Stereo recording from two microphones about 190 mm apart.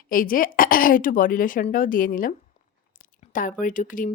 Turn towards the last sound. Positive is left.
turn(degrees=45)  # may be behind; listen again after turning